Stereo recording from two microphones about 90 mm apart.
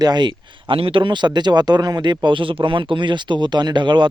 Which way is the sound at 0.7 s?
80° right.